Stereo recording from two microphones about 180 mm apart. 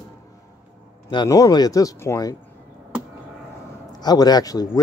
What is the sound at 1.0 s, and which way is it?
Speech, 20° left (ahead or behind).